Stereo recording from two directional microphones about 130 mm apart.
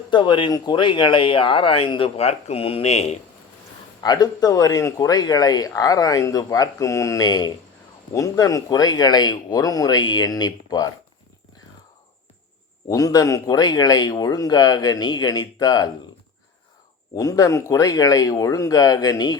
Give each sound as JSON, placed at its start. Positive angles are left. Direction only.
{"t": 0.1, "sound": "speech", "side_deg": 35}
{"t": 4.0, "sound": "speech", "side_deg": 30}
{"t": 12.9, "sound": "speech", "side_deg": 30}
{"t": 17.2, "sound": "speech", "side_deg": 25}